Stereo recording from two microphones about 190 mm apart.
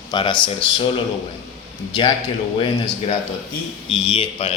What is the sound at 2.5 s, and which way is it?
A man's voice, 30° left (ahead or behind).